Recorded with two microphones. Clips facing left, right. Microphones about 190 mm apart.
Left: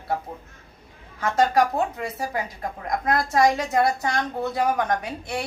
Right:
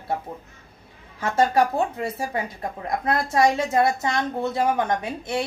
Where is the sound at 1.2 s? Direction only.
25° right (ahead or behind).